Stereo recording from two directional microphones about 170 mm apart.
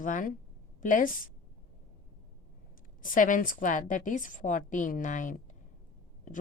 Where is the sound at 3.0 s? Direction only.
50° left (ahead or behind).